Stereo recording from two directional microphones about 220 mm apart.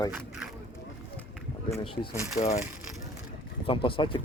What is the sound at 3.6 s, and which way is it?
Speech, 25° left (ahead or behind).